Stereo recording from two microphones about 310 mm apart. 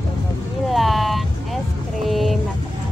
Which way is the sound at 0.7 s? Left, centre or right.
Centre.